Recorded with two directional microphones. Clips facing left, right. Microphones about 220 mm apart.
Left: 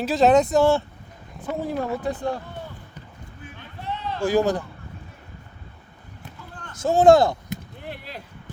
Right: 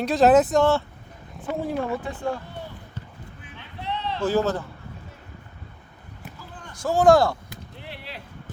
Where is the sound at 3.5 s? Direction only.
50° left (ahead or behind).